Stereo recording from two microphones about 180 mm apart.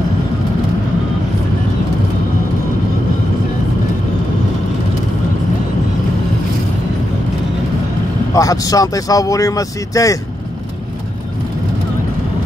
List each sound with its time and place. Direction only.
8.3 s speech: 20° left (ahead or behind)